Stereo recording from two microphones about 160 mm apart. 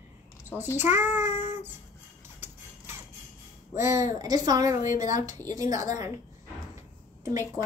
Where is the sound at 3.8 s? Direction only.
20° right (ahead or behind).